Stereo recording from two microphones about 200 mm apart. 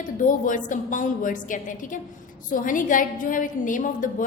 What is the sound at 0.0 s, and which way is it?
A woman's voice, 40° left (ahead or behind).